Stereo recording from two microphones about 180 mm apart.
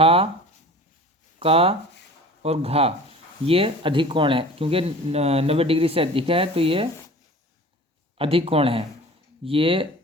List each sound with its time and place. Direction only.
0.0 s speech: 30° right (ahead or behind)
1.4 s speech: 30° right (ahead or behind)
8.2 s speech: 30° right (ahead or behind)